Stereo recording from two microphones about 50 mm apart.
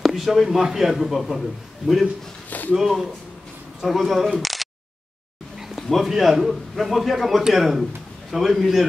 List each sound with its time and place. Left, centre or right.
0.0 s a man's voice: centre
2.7 s a man's voice: centre